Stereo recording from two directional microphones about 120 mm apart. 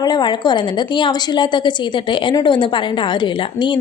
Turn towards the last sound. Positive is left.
turn(degrees=40)  # may be behind; listen again after turning